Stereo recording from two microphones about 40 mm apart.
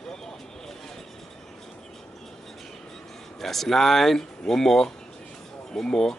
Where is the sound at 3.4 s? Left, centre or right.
Centre.